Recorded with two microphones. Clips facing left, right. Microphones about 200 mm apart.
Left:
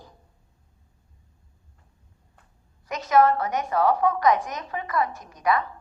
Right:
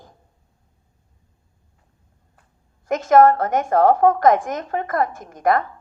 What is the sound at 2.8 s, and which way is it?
A woman's voice, 50° right (ahead or behind).